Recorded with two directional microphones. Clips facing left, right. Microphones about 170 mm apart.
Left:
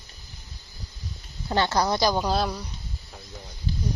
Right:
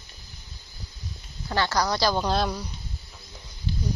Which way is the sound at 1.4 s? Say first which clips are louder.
Left 2 dB; 20° left (ahead or behind).